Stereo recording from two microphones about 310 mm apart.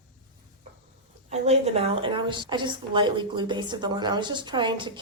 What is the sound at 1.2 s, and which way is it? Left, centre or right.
A woman's voice, right.